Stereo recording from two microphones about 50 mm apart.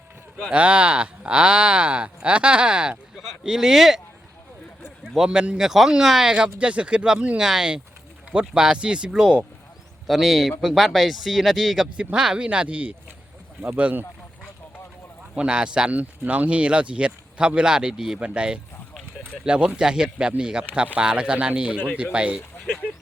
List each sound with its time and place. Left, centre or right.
0.5 s speech: right; by 4.0 s centre
5.1 s speech: centre
6.3 s speech: right
10.1 s speech: centre
11.9 s speech: centre
15.4 s speech: centre
15.9 s speech: right; by 18.2 s centre
18.2 s speech: right